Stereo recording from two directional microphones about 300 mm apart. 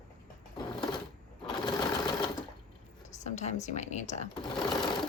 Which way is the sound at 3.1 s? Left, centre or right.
Left.